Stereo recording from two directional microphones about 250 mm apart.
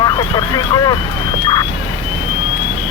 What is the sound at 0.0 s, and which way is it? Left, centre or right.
Speech, centre.